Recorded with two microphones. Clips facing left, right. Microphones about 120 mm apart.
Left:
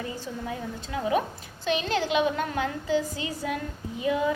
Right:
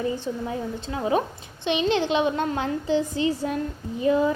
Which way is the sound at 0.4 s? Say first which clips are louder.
Right 4 dB; 30° right (ahead or behind).